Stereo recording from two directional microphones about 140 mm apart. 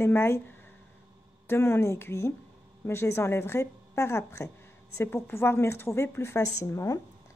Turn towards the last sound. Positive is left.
turn(degrees=20)  # may be behind; listen again after turning